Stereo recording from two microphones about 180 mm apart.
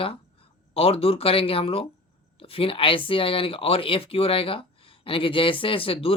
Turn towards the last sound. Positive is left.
turn(degrees=30)  # may be behind; listen again after turning